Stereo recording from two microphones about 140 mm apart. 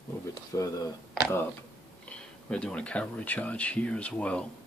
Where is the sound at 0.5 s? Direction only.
25° left (ahead or behind).